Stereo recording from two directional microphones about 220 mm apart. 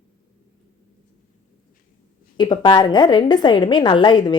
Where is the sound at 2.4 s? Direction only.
20° left (ahead or behind).